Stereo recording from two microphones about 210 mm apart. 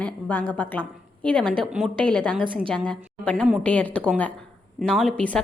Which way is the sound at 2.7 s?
5° left (ahead or behind).